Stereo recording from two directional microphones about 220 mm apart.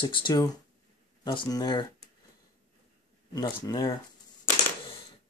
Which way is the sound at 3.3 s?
15° left (ahead or behind).